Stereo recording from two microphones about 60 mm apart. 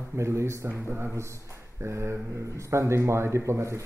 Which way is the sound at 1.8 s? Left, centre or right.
Right.